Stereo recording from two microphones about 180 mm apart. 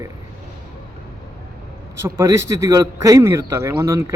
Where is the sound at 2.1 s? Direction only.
15° right (ahead or behind).